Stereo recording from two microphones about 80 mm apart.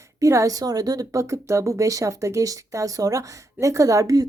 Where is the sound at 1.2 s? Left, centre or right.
Right.